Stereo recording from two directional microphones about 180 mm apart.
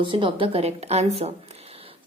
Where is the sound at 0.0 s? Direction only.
25° right (ahead or behind).